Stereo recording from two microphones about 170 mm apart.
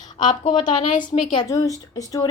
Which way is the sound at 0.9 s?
50° left (ahead or behind).